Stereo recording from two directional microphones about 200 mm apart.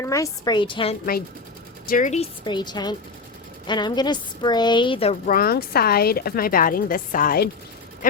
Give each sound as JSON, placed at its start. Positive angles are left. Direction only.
{"t": 0.0, "sound": "a woman's voice", "side_deg": 15}
{"t": 1.9, "sound": "a woman's voice", "side_deg": 40}
{"t": 2.4, "sound": "a woman's voice", "side_deg": 20}
{"t": 5.3, "sound": "a woman's voice", "side_deg": 50}